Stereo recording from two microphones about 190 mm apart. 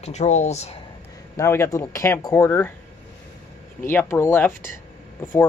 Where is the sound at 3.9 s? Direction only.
10° left (ahead or behind).